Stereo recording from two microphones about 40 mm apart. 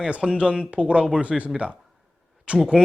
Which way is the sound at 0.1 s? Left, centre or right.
Right.